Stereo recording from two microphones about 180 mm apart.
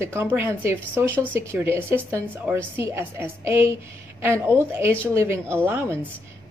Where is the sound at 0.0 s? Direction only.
15° right (ahead or behind).